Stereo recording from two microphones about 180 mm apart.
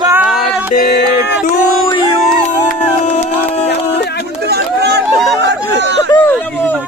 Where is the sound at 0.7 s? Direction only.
50° left (ahead or behind).